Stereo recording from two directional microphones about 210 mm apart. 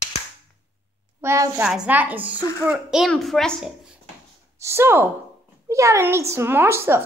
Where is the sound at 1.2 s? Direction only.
15° right (ahead or behind).